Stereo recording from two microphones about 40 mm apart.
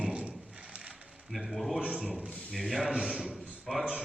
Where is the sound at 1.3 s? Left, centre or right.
Centre.